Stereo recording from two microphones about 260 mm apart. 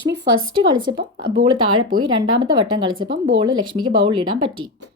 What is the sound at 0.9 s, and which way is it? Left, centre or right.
Speech, right.